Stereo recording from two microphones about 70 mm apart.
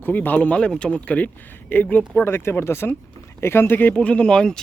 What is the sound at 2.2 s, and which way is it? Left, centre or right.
Speech, left.